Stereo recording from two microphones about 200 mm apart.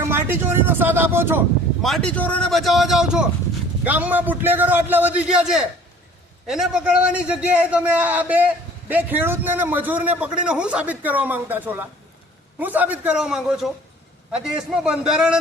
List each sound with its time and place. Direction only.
0.1 s a man's voice: 10° right (ahead or behind)
2.0 s a man's voice: 5° left (ahead or behind)